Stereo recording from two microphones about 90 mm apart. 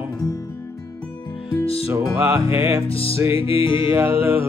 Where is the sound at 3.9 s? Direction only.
30° right (ahead or behind).